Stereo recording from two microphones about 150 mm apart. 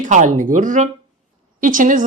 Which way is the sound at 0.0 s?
55° right (ahead or behind).